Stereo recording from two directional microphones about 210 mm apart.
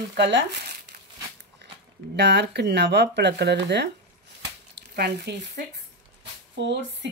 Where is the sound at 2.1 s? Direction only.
55° right (ahead or behind).